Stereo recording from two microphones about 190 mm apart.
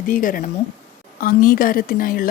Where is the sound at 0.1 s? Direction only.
45° left (ahead or behind).